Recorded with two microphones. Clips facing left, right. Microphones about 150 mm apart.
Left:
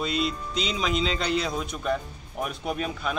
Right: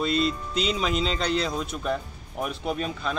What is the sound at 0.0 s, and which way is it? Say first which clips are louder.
A man's voice: right 3 dB; centre (ahead or behind).